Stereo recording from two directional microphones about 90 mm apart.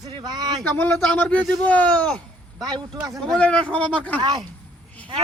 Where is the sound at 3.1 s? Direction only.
10° left (ahead or behind).